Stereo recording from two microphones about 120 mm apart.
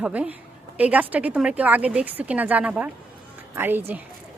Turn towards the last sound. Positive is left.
turn(degrees=-15)  # may be behind; listen again after turning